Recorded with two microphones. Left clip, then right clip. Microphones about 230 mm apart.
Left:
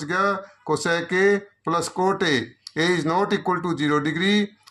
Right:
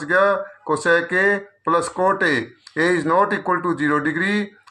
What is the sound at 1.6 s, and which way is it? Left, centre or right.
A man's voice, left.